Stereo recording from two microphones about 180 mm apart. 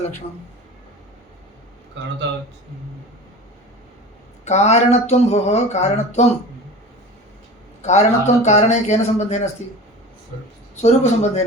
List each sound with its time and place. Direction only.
4.4 s speech: 40° left (ahead or behind)
7.8 s speech: 40° left (ahead or behind)
10.8 s speech: 40° left (ahead or behind)